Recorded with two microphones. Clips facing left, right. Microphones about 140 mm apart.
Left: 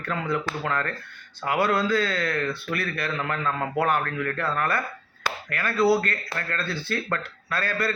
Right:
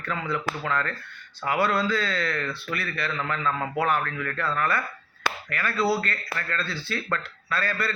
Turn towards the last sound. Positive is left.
turn(degrees=45)  # may be behind; listen again after turning